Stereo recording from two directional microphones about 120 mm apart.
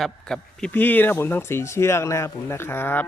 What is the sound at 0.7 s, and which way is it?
Speech, 15° left (ahead or behind).